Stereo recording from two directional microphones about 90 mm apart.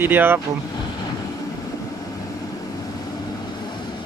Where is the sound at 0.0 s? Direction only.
25° right (ahead or behind).